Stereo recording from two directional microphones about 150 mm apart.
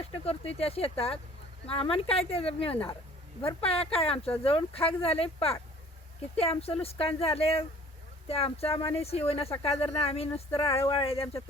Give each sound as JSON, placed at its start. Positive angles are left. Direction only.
{"t": 0.0, "sound": "speech", "side_deg": 40}